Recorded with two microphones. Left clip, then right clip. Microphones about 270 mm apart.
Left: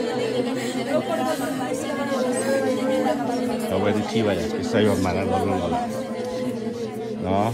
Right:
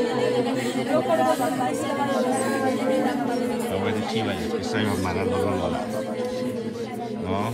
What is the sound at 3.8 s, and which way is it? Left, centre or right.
Speech, centre.